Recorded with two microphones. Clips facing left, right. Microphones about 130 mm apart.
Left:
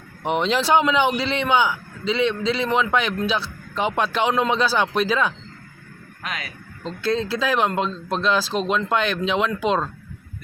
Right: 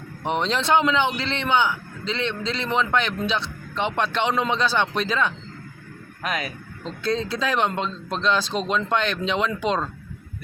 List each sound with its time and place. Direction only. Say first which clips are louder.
0.3 s a man's voice: left 2 dB; 5° left (ahead or behind)
6.8 s speech: left 2 dB; centre (ahead or behind)